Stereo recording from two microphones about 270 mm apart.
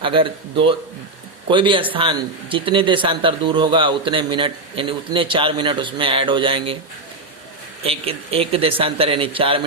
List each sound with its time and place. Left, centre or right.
0.0 s speech: centre
7.9 s speech: right